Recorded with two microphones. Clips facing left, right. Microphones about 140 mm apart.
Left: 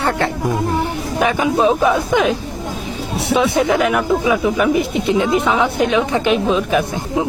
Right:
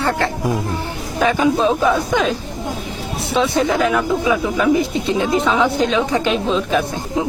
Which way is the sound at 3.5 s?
20° left (ahead or behind).